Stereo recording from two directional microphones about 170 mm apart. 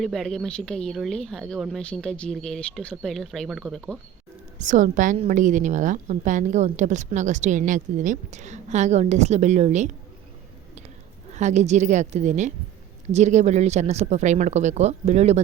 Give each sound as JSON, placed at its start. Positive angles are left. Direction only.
{"t": 0.0, "sound": "speech", "side_deg": 0}
{"t": 4.5, "sound": "a woman's voice", "side_deg": -45}
{"t": 11.3, "sound": "a woman's voice", "side_deg": -45}